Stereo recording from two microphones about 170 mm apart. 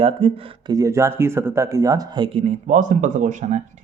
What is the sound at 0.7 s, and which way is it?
Speech, 15° right (ahead or behind).